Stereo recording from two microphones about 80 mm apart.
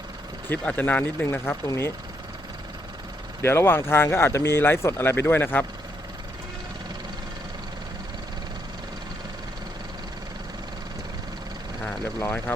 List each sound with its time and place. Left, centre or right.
0.6 s speech: centre
3.4 s speech: left
12.2 s speech: left